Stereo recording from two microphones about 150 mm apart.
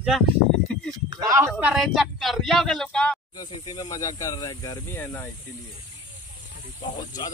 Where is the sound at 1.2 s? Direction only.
20° right (ahead or behind).